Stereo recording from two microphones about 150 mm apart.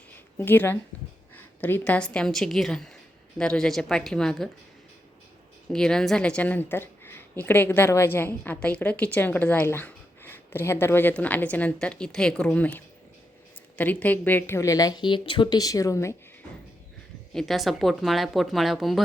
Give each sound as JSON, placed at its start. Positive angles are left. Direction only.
{"t": 0.3, "sound": "a woman's voice", "side_deg": 15}
{"t": 5.7, "sound": "a woman's voice", "side_deg": 5}
{"t": 17.3, "sound": "speech", "side_deg": 0}